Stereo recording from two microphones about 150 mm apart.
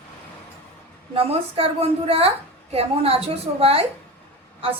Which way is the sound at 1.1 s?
40° right (ahead or behind).